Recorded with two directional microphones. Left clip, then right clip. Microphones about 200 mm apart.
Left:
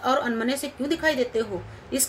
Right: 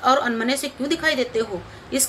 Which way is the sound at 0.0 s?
25° left (ahead or behind).